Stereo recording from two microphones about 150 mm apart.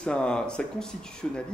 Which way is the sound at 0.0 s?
5° left (ahead or behind).